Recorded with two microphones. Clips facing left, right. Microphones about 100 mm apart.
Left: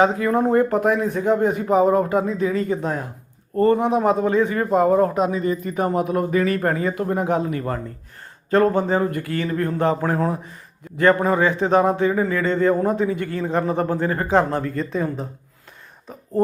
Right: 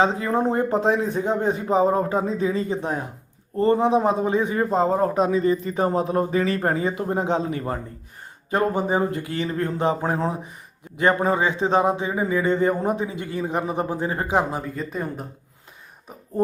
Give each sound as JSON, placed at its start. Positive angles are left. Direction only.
{"t": 0.0, "sound": "speech", "side_deg": -25}
{"t": 8.4, "sound": "speech", "side_deg": -15}